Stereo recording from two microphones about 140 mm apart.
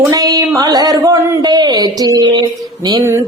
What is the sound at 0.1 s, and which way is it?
Speech, 25° right (ahead or behind).